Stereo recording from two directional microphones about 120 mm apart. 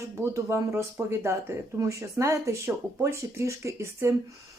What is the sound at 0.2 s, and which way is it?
Speech, 25° right (ahead or behind).